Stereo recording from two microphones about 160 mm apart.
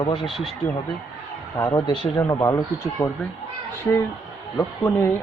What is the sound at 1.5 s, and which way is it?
A man's voice, 20° left (ahead or behind).